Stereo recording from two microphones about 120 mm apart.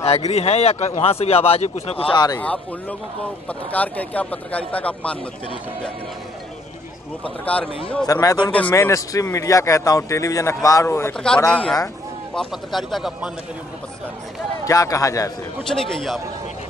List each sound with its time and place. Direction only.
0.0 s speech: 60° left (ahead or behind)
2.1 s speech: 30° left (ahead or behind)
2.4 s a man's voice: 10° left (ahead or behind)
7.4 s a man's voice: 10° left (ahead or behind)
8.1 s a man's voice: 30° left (ahead or behind)
8.5 s a man's voice: 10° left (ahead or behind)
8.7 s a man's voice: 25° left (ahead or behind)
11.1 s a man's voice: 5° left (ahead or behind)
14.6 s a man's voice: 30° left (ahead or behind)
15.7 s a man's voice: centre (ahead or behind)